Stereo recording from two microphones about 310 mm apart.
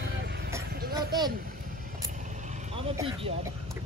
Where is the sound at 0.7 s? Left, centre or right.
Right.